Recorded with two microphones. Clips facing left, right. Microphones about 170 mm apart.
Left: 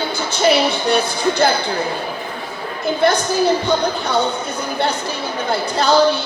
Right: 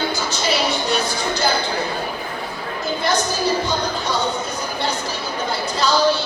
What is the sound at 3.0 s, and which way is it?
Music, 60° left (ahead or behind).